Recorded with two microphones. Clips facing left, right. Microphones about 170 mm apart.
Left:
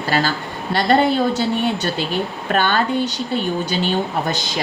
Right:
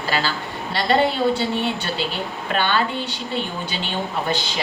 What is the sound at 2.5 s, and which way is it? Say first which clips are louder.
Speech: left 4 dB; 45° left (ahead or behind).